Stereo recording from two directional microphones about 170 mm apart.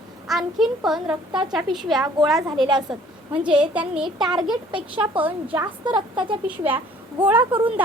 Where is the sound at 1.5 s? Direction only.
Centre (ahead or behind).